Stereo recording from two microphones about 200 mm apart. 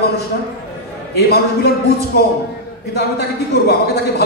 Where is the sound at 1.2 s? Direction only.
55° left (ahead or behind).